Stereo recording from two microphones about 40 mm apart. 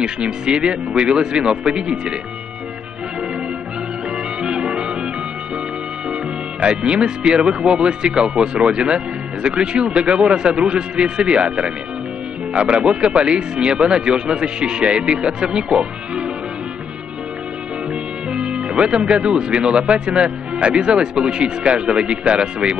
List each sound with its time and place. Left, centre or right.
0.0 s speech: right
4.6 s music: right
6.6 s speech: right
18.3 s music: right
18.9 s speech: right
20.9 s speech: centre